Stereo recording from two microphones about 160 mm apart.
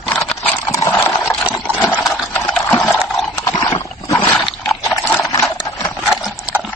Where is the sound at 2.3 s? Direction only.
10° left (ahead or behind).